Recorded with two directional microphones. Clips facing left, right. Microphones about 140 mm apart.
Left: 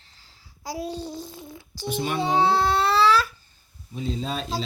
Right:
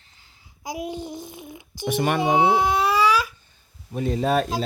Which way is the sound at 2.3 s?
15° right (ahead or behind).